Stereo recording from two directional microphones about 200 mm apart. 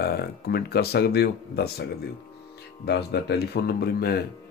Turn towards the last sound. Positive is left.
turn(degrees=50)  # may be behind; listen again after turning